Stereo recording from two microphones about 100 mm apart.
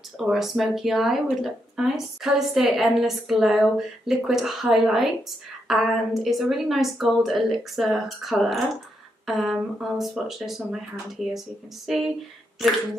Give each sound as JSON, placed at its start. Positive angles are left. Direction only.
{"t": 0.2, "sound": "speech", "side_deg": -5}